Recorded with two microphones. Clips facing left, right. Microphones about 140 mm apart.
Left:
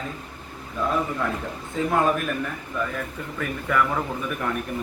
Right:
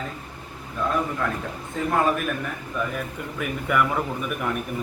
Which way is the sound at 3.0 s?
10° right (ahead or behind).